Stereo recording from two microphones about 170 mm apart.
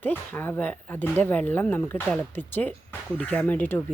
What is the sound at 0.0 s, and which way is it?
Speech, 10° left (ahead or behind).